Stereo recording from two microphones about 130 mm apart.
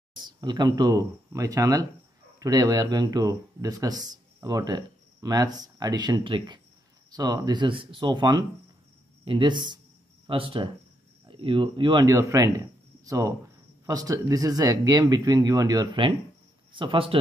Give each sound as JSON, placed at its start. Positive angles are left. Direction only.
{"t": 0.1, "sound": "speech", "side_deg": -35}
{"t": 12.1, "sound": "speech", "side_deg": -25}